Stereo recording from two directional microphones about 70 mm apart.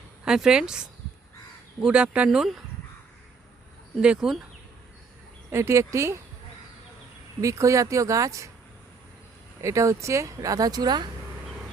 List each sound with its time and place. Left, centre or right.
0.3 s speech: centre
4.0 s speech: centre
5.5 s speech: right
7.4 s speech: right
9.6 s speech: right